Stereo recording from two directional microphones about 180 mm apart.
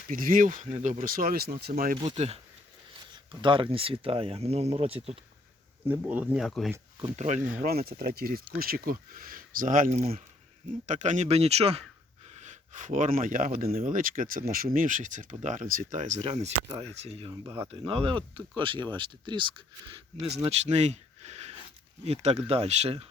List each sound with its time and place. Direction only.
0.1 s speech: 50° right (ahead or behind)
1.7 s speech: 50° right (ahead or behind)
2.0 s speech: 35° right (ahead or behind)
5.9 s speech: 10° right (ahead or behind)
7.0 s speech: 40° right (ahead or behind)
7.6 s speech: 55° right (ahead or behind); by 19.9 s 25° right (ahead or behind)
20.5 s speech: 40° right (ahead or behind)